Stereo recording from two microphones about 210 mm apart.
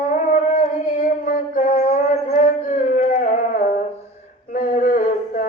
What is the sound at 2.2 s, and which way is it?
Howl, 40° left (ahead or behind).